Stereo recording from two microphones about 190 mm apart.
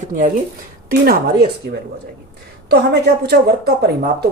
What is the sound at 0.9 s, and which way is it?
Speech, 55° right (ahead or behind).